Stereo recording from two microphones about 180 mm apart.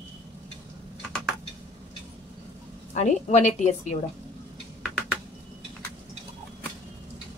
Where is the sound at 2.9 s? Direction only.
40° left (ahead or behind).